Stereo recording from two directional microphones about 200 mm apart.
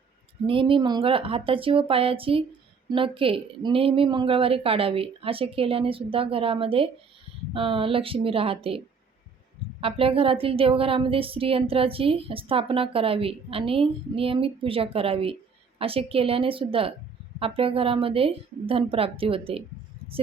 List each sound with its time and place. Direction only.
0.4 s a woman's voice: 25° right (ahead or behind)
9.8 s a woman's voice: 25° right (ahead or behind)